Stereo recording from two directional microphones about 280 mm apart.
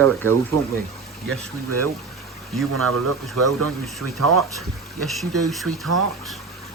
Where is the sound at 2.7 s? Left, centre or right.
Right.